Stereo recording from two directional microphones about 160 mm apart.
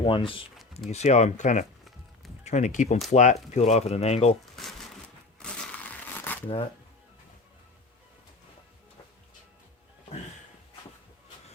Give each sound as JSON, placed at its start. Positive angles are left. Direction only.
{"t": 0.0, "sound": "speech", "side_deg": 30}
{"t": 0.9, "sound": "speech", "side_deg": 45}
{"t": 5.4, "sound": "crumpling", "side_deg": 10}